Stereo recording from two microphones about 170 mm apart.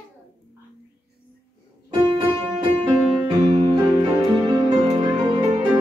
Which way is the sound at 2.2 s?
30° right (ahead or behind).